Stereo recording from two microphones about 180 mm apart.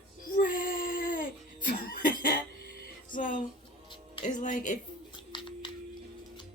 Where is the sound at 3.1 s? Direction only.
45° left (ahead or behind).